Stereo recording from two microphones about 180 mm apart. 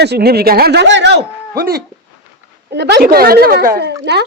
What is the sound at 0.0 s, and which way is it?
A man's voice, 65° right (ahead or behind).